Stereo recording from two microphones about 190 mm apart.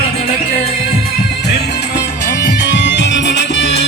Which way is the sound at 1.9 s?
60° left (ahead or behind).